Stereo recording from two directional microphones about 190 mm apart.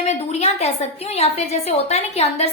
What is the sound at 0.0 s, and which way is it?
Speech, 35° left (ahead or behind).